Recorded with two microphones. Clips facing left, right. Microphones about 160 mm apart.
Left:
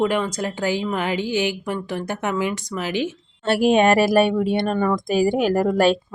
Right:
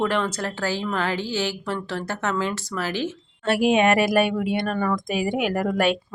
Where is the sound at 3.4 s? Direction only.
30° left (ahead or behind).